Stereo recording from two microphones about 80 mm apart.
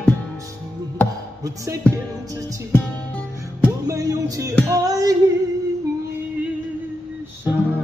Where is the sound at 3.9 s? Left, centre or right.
Right.